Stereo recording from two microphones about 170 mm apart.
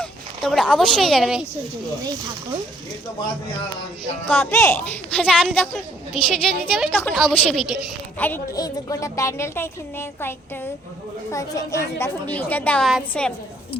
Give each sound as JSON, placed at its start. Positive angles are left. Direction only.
{"t": 0.0, "sound": "speech", "side_deg": 0}
{"t": 4.3, "sound": "a woman's voice", "side_deg": 15}
{"t": 8.5, "sound": "a woman's voice", "side_deg": 20}